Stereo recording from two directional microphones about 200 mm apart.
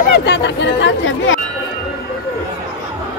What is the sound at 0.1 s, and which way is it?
Speech, 60° left (ahead or behind).